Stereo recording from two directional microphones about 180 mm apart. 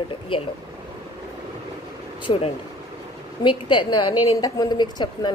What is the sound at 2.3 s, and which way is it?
Speech, 30° left (ahead or behind).